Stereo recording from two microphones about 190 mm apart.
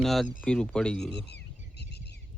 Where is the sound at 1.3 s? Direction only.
60° left (ahead or behind).